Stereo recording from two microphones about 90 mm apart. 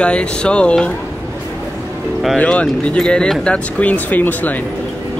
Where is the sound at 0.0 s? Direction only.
10° left (ahead or behind).